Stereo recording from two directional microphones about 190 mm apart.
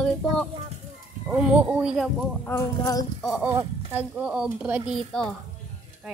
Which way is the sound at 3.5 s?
15° right (ahead or behind).